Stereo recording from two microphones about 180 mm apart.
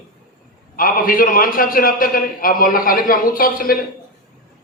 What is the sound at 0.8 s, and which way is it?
A man's voice, 50° left (ahead or behind).